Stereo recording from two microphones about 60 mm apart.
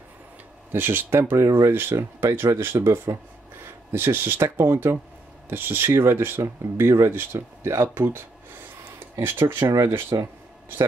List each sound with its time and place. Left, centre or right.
0.7 s speech: right